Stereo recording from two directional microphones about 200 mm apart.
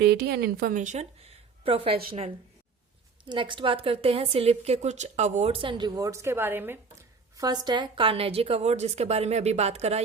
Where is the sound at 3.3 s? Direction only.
25° right (ahead or behind).